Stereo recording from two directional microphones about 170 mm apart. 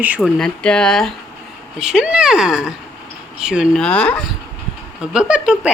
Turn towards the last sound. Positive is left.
turn(degrees=-5)  # may be behind; listen again after turning